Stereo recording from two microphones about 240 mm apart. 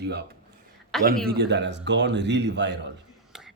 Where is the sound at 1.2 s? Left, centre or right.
Right.